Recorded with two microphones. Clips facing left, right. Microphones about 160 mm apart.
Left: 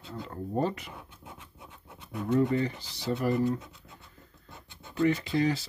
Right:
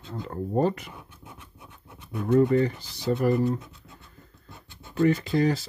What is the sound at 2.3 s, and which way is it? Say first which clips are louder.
Speech: right 5 dB; 45° right (ahead or behind).